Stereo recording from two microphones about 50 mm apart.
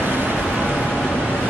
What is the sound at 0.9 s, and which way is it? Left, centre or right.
Vehicle, centre.